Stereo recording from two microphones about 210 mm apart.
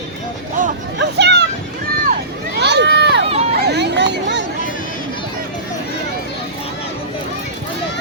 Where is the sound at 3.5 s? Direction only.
50° right (ahead or behind).